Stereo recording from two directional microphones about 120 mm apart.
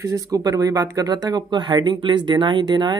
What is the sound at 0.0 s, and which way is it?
Speech, 30° right (ahead or behind).